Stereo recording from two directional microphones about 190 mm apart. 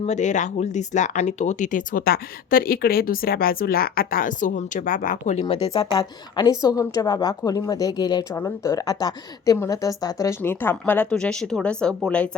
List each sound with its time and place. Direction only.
0.0 s speech: 40° left (ahead or behind)
5.6 s a woman's voice: 30° left (ahead or behind); by 12.4 s 5° left (ahead or behind)